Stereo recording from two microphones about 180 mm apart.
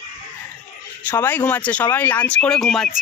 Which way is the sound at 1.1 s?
10° left (ahead or behind).